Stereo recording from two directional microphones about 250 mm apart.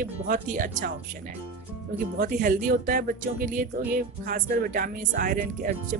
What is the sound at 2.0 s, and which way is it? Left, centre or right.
Speech, right.